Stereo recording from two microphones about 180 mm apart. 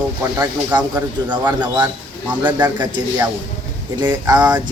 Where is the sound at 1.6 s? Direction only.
25° right (ahead or behind).